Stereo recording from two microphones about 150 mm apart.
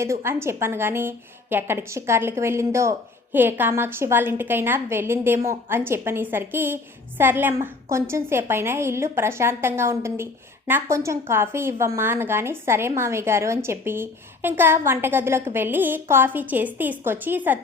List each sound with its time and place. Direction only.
0.0 s a woman's voice: 20° right (ahead or behind)